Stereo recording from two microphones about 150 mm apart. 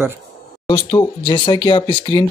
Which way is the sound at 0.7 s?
30° left (ahead or behind).